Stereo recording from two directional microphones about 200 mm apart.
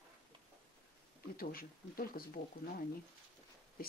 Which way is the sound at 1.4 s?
45° left (ahead or behind).